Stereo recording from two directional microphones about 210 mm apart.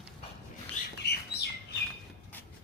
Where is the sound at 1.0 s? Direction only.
50° left (ahead or behind).